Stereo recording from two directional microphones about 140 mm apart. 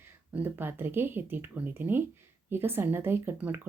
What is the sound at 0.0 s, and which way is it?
Speech, 15° right (ahead or behind).